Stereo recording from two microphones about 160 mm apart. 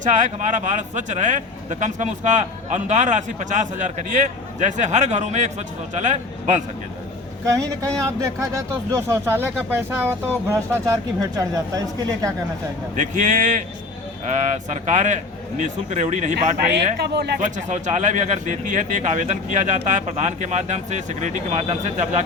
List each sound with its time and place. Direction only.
0.0 s speech: 50° right (ahead or behind)
8.9 s speech: 15° right (ahead or behind)
13.0 s speech: 50° right (ahead or behind)
16.7 s speech: 90° right
17.7 s speech: 50° right (ahead or behind)